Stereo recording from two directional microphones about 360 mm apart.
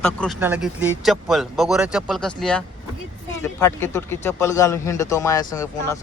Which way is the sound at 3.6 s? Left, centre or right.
Centre.